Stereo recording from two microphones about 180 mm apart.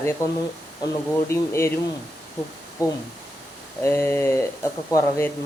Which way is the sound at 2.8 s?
20° left (ahead or behind).